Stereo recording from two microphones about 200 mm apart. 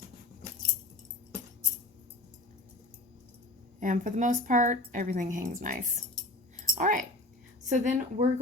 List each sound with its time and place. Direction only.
3.8 s a woman's voice: 40° right (ahead or behind)